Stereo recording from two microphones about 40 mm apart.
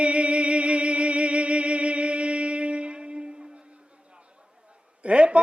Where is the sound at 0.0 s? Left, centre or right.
Right.